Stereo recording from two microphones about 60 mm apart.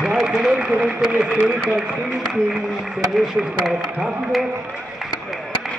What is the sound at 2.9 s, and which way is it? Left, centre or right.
Speech, centre.